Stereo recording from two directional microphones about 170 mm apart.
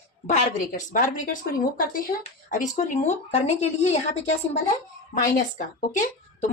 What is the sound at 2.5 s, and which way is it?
Speech, 50° left (ahead or behind).